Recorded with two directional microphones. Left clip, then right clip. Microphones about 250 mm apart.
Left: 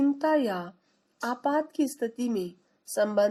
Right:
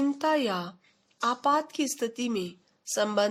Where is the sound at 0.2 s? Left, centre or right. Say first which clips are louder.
Left 1 dB; centre.